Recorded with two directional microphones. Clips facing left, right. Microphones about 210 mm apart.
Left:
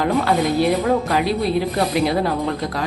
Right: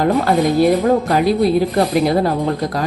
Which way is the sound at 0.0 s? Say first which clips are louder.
Right 4 dB; 45° right (ahead or behind).